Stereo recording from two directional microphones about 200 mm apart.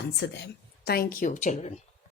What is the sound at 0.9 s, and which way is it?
Speech, 45° left (ahead or behind).